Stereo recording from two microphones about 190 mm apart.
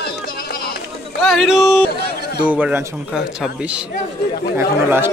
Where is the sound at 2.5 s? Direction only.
5° right (ahead or behind).